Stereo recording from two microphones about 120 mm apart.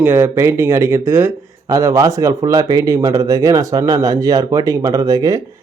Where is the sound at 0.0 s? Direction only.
20° right (ahead or behind).